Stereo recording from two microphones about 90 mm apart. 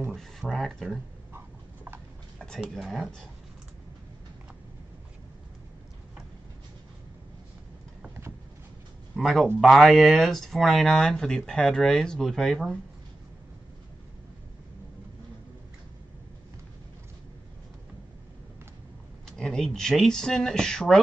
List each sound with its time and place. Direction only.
0.1 s speech: 5° left (ahead or behind)
2.3 s a sound: 5° left (ahead or behind)
2.7 s speech: centre (ahead or behind)
9.1 s a man's voice: centre (ahead or behind)
19.2 s speech: 5° left (ahead or behind)